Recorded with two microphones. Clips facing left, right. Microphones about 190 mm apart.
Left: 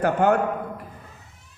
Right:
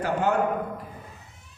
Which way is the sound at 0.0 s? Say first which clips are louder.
Left 5 dB; 55° left (ahead or behind).